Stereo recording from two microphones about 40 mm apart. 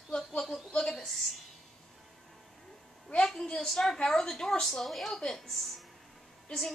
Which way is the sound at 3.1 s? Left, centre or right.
Left.